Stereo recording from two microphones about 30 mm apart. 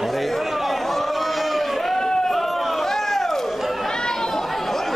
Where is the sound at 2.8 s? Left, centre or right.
Centre.